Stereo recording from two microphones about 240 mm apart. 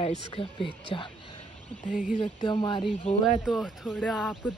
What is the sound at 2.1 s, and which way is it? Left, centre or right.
Speech, centre.